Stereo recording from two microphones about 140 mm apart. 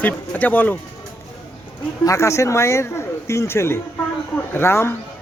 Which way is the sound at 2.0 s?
20° left (ahead or behind).